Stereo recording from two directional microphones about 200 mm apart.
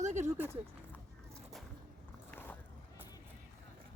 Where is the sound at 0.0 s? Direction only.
35° right (ahead or behind).